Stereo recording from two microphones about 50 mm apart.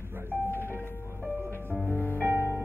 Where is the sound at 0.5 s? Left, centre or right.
Left.